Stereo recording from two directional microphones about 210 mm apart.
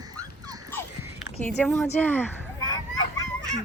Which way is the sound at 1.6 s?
Centre (ahead or behind).